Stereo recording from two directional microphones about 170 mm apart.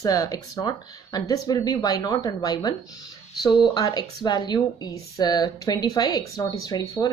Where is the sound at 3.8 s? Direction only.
25° left (ahead or behind).